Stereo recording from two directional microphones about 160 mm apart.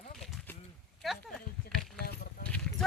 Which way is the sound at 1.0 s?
Centre (ahead or behind).